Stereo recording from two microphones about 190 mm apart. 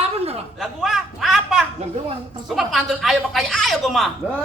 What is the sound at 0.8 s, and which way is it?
A woman's voice, centre (ahead or behind).